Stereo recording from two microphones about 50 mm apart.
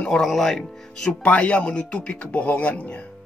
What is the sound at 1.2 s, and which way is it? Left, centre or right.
Speech, left.